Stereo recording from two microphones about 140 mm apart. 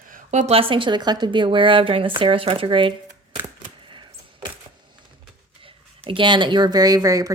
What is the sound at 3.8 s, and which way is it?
Typewriter, 35° right (ahead or behind).